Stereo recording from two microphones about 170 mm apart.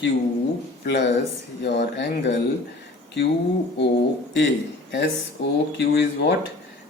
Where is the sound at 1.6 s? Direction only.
80° left.